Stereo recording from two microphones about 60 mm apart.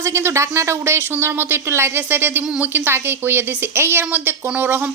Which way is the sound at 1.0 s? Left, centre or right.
Right.